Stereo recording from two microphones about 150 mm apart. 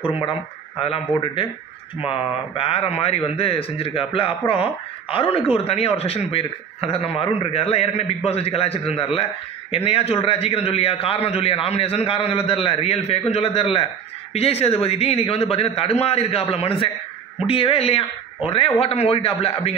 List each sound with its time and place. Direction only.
0.2 s a man's voice: 35° left (ahead or behind)